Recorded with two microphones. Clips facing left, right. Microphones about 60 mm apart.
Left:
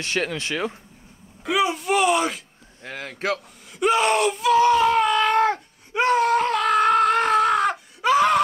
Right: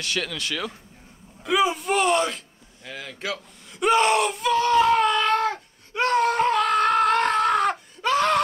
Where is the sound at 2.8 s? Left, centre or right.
Left.